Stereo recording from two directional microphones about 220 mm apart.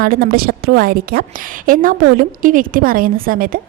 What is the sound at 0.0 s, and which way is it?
A woman's voice, 45° right (ahead or behind).